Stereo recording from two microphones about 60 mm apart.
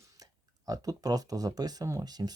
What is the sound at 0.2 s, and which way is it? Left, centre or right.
Speech, right.